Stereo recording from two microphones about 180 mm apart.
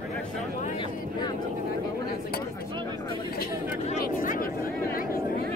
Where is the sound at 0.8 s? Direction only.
25° left (ahead or behind).